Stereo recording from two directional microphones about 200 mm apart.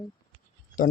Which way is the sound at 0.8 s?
40° left (ahead or behind).